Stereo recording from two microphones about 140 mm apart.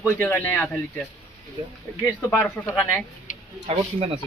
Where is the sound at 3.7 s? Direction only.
45° right (ahead or behind).